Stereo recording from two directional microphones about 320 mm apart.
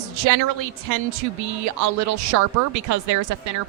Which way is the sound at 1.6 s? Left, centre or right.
Right.